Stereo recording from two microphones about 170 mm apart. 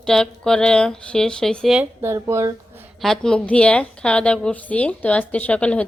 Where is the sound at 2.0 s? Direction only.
15° right (ahead or behind).